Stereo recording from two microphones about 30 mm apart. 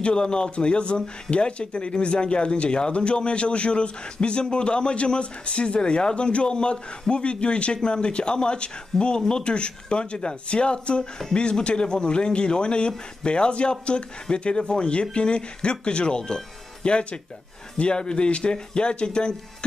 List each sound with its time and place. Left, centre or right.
0.1 s speech: left
16.2 s speech: left
16.8 s speech: left